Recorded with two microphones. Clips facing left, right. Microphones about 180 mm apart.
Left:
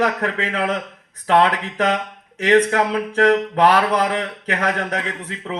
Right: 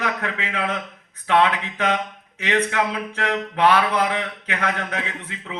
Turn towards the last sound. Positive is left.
turn(degrees=40)  # may be behind; listen again after turning